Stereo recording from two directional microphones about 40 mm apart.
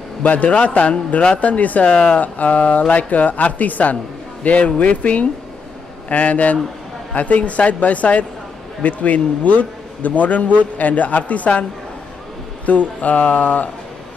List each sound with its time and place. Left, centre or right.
0.2 s a man's voice: left
1.9 s speech: left
2.1 s a man's voice: left
3.9 s a man's voice: left
12.6 s a man's voice: left